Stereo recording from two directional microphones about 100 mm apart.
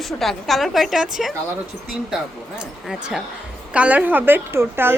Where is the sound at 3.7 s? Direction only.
15° right (ahead or behind).